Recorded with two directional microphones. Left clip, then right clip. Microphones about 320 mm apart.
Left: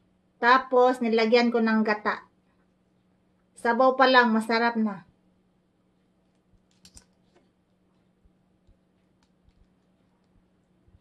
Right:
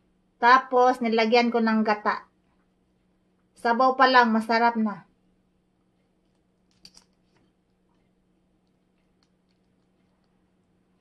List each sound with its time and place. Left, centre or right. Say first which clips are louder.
0.4 s speech: right 2 dB; centre
3.6 s speech: right 1 dB; centre